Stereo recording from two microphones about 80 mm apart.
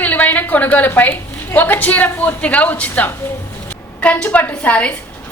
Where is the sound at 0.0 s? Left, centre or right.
Centre.